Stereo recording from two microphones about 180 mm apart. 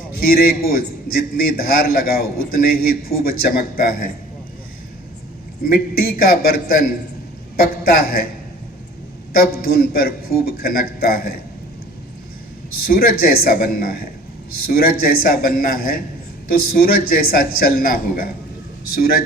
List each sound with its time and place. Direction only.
0.2 s a man's voice: 55° left (ahead or behind)
5.6 s a man's voice: 55° left (ahead or behind)
9.4 s a man's voice: 55° left (ahead or behind)
12.8 s a man's voice: 55° left (ahead or behind)